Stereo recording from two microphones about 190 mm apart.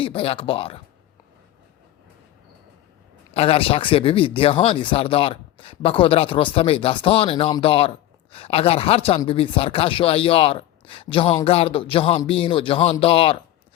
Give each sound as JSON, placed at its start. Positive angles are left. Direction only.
{"t": 0.0, "sound": "speech", "side_deg": 30}
{"t": 3.3, "sound": "speech", "side_deg": 30}